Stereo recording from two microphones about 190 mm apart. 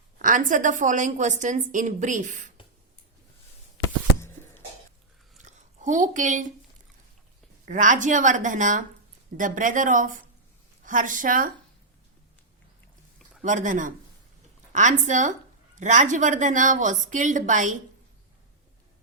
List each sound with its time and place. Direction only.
0.2 s a woman's voice: 45° right (ahead or behind)
5.5 s a woman's voice: 40° right (ahead or behind)
7.6 s a woman's voice: 45° right (ahead or behind)
13.4 s a woman's voice: 40° right (ahead or behind)